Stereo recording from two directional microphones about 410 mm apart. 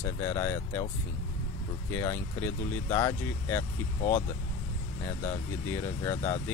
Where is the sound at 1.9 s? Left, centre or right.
Centre.